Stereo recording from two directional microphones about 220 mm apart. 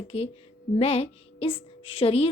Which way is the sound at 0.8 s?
25° left (ahead or behind).